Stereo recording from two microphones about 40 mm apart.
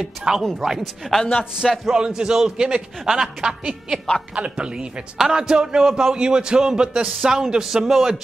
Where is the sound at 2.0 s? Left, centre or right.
Centre.